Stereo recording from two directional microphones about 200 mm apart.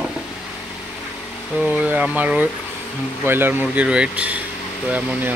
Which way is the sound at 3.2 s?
10° right (ahead or behind).